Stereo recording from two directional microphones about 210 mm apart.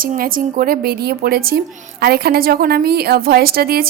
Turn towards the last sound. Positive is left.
turn(degrees=-45)  # may be behind; listen again after turning